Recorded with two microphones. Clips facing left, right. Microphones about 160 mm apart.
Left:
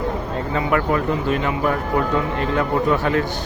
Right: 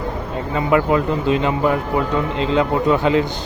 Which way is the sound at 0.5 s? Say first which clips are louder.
Right 4 dB; 15° right (ahead or behind).